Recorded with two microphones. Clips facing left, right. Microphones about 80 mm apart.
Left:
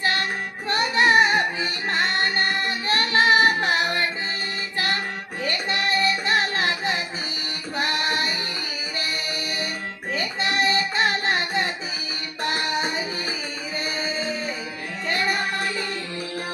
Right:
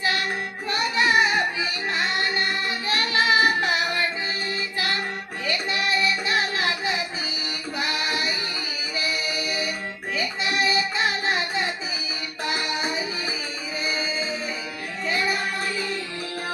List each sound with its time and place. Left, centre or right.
0.7 s music: left
5.5 s music: left